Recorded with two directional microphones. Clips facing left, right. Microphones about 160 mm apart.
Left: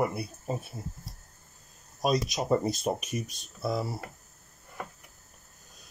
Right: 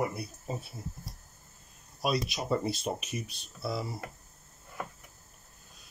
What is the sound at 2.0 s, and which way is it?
Speech, 40° left (ahead or behind).